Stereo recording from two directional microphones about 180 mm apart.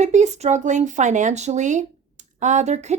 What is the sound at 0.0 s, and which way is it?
Speech, 40° right (ahead or behind).